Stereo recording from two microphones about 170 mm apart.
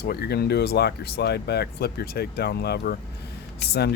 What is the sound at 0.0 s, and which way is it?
Speech, 70° left (ahead or behind).